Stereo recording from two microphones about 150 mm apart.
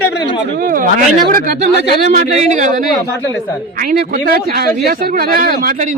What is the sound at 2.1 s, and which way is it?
Speech, 55° right (ahead or behind).